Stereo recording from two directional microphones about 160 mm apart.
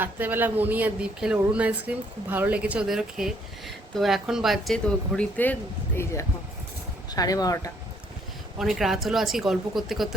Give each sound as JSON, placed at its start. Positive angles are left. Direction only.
{"t": 0.0, "sound": "speech", "side_deg": -10}
{"t": 7.1, "sound": "speech", "side_deg": 25}
{"t": 8.5, "sound": "speech", "side_deg": 0}